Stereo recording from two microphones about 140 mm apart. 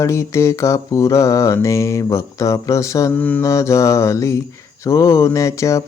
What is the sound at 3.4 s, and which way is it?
Speech, 20° left (ahead or behind).